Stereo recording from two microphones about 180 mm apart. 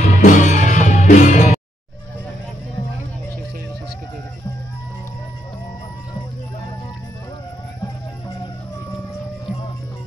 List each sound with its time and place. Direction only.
0.0 s music: 45° left (ahead or behind)